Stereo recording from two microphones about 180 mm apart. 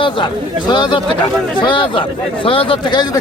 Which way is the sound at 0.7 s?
25° left (ahead or behind).